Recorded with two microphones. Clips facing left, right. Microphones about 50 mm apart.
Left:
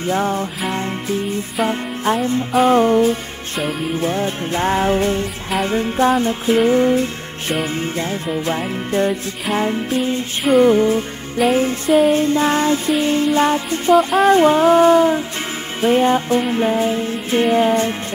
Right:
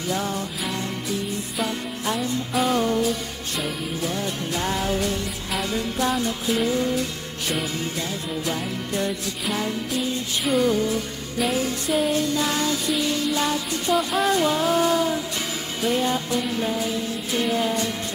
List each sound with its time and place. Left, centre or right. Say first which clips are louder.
0.0 s music: left 7 dB; left